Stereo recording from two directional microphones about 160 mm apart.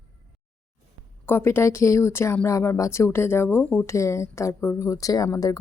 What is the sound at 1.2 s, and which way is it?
Speech, 15° left (ahead or behind).